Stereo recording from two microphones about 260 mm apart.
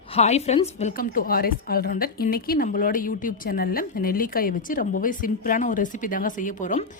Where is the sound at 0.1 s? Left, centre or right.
Left.